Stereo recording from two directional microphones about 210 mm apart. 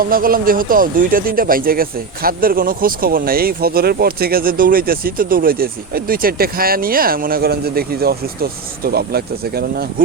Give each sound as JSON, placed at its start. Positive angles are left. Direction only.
{"t": 0.0, "sound": "speech", "side_deg": -45}